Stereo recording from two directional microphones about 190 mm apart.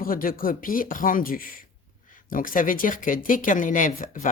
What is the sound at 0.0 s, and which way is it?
Speech, 50° left (ahead or behind).